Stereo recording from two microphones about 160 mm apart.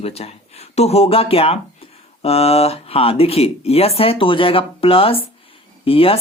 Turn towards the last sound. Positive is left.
turn(degrees=35)  # may be behind; listen again after turning